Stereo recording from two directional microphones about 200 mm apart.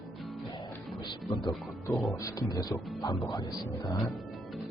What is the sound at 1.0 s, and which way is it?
Speech, 20° left (ahead or behind).